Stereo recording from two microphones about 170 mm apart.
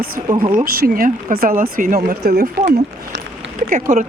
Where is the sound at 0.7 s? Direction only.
60° right (ahead or behind).